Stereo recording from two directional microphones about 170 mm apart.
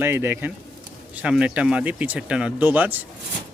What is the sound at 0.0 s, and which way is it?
Speech, 15° right (ahead or behind).